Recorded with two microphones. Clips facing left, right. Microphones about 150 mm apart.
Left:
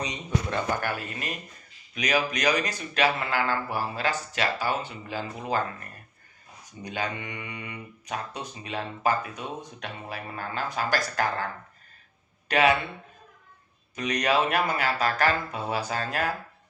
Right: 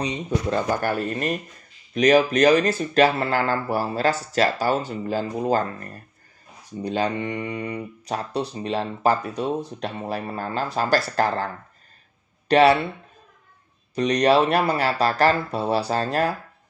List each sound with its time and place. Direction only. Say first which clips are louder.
0.0 s speech: right 5 dB; 35° right (ahead or behind)
13.9 s speech: right 7 dB; 35° right (ahead or behind)